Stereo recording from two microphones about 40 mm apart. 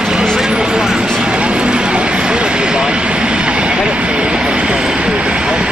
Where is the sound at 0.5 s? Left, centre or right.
Right.